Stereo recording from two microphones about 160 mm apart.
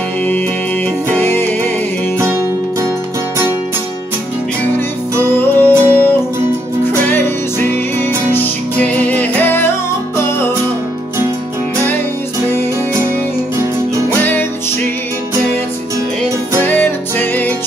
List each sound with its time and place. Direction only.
1.2 s music: 15° left (ahead or behind)
4.7 s music: 15° left (ahead or behind)
7.1 s music: 15° left (ahead or behind)
16.6 s music: 10° left (ahead or behind)